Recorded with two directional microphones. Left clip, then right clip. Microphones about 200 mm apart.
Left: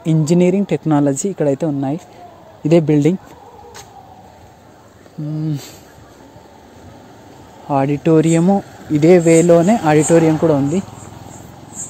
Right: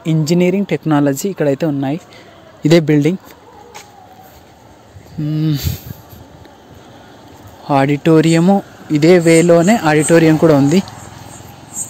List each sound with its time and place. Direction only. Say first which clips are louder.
0.0 s speech: even; 10° left (ahead or behind)
5.3 s speech: right 5 dB; 20° right (ahead or behind)
7.6 s speech: right 3 dB; 10° right (ahead or behind)
10.3 s speech: right 4 dB; 20° right (ahead or behind)